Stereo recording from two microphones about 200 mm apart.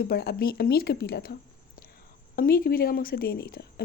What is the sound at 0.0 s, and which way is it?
Speech, 50° left (ahead or behind).